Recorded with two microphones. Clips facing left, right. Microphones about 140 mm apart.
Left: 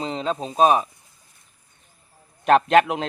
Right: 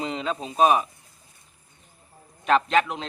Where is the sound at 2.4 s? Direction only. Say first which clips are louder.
Left 5 dB; 55° left (ahead or behind).